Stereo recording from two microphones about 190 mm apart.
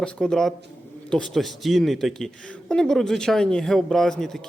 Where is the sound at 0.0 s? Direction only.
5° left (ahead or behind).